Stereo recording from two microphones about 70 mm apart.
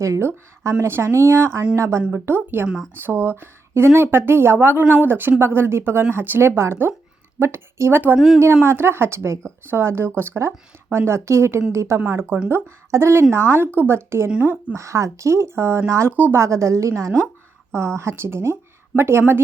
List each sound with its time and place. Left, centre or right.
0.0 s speech: right
2.1 s speech: right
14.3 s speech: centre
14.8 s speech: right